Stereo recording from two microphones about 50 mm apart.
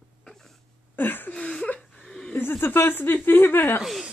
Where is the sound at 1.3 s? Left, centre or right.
Left.